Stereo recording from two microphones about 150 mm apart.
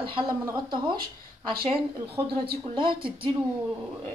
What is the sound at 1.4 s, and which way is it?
Speech, 35° right (ahead or behind).